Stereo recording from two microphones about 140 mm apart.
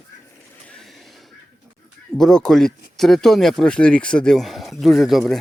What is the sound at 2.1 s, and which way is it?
Speech, 5° left (ahead or behind).